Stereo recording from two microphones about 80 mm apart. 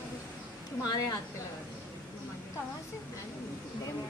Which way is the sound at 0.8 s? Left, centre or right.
Left.